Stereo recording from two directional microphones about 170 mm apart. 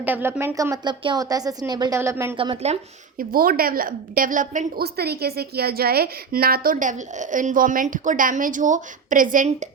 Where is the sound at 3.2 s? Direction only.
60° right (ahead or behind).